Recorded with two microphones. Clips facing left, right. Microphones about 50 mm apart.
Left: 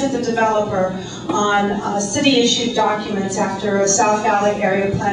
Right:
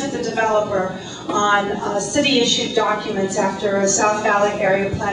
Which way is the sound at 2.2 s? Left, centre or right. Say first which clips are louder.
Left 2 dB; centre.